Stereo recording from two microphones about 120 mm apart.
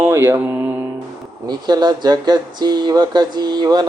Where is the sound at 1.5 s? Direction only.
35° right (ahead or behind).